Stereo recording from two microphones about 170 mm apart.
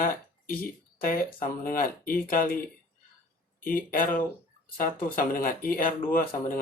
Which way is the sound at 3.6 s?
55° left (ahead or behind).